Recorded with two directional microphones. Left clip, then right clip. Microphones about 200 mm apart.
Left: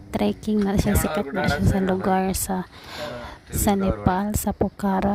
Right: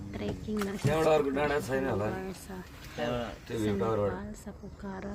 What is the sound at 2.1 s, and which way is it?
Speech, 55° left (ahead or behind).